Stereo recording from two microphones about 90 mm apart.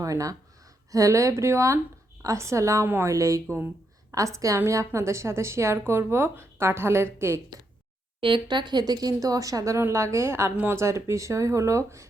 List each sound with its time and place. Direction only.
0.0 s speech: 40° right (ahead or behind)
2.8 s a woman's voice: 20° right (ahead or behind)
3.1 s a woman's voice: 35° right (ahead or behind)
8.2 s speech: 65° right (ahead or behind); by 12.0 s 35° right (ahead or behind)